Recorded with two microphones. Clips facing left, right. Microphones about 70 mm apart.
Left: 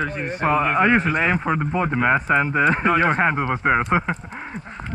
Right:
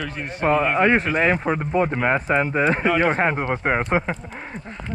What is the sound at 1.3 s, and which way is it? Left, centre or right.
Speech, centre.